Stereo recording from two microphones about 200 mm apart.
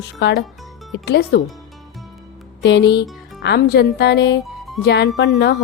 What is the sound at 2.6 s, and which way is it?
Music, 60° left (ahead or behind).